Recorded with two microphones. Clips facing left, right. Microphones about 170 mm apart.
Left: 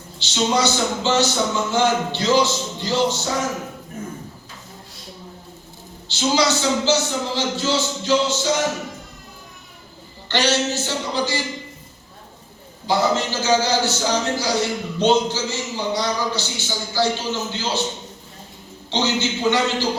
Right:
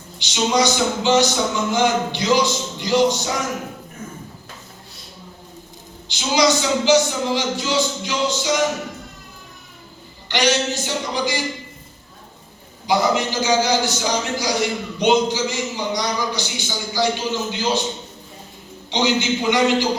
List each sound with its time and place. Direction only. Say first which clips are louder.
0.2 s a man's voice: right 1 dB; 15° right (ahead or behind)
6.1 s a man's voice: right 1 dB; 15° right (ahead or behind)
10.2 s a man's voice: right 1 dB; 15° right (ahead or behind)
12.9 s a man's voice: right 1 dB; 15° right (ahead or behind)
18.9 s a man's voice: right 2 dB; 15° right (ahead or behind)